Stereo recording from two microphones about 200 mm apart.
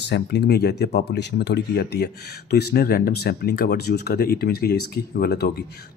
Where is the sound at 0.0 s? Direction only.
55° left (ahead or behind).